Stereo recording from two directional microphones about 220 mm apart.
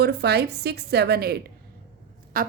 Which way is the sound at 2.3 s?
40° right (ahead or behind).